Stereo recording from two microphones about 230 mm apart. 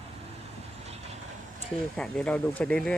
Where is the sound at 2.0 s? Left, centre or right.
Centre.